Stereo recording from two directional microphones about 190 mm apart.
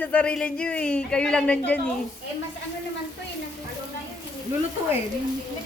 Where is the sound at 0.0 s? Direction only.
5° left (ahead or behind).